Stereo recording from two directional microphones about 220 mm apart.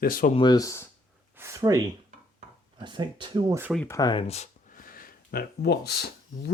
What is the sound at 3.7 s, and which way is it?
Speech, 10° left (ahead or behind).